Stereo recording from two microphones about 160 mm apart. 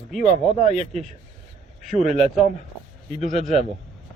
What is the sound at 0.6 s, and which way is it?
Speech, 45° left (ahead or behind).